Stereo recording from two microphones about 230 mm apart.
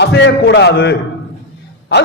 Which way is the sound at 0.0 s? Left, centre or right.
Left.